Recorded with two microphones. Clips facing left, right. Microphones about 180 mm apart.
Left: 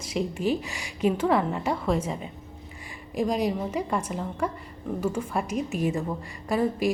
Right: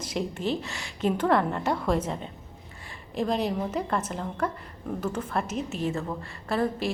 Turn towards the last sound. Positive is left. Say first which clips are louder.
# left 2 dB
turn(degrees=15)  # may be behind; listen again after turning